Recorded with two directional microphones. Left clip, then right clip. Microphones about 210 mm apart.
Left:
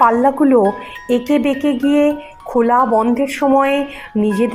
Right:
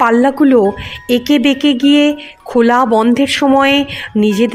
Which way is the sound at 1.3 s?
35° right (ahead or behind).